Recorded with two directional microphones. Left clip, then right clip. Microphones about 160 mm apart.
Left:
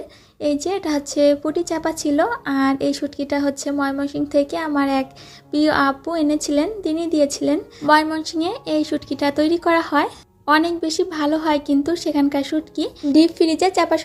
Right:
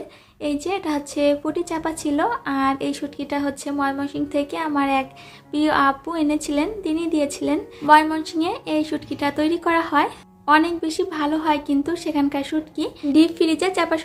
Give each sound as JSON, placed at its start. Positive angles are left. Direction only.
{"t": 0.4, "sound": "speech", "side_deg": 30}